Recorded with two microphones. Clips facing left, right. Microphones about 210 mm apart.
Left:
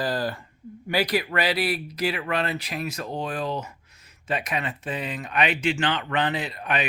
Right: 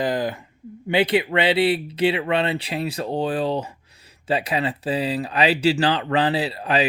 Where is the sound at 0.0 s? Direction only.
20° right (ahead or behind).